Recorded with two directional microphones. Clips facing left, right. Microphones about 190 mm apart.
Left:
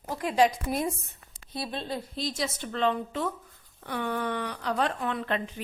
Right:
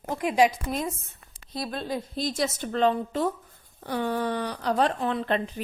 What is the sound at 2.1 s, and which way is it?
A woman's voice, 50° right (ahead or behind).